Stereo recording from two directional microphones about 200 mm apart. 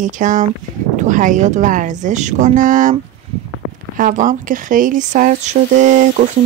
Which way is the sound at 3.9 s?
40° right (ahead or behind).